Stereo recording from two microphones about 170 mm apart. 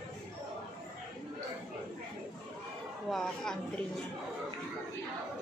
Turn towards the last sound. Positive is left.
turn(degrees=5)  # may be behind; listen again after turning